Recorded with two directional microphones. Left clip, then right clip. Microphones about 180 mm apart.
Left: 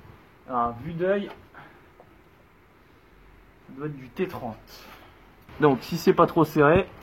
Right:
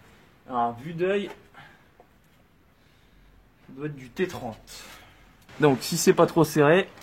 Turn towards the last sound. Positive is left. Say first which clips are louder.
# even
turn(degrees=-35)  # may be behind; listen again after turning